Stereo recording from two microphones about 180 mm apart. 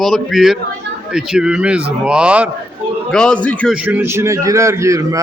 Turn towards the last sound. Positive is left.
turn(degrees=-15)  # may be behind; listen again after turning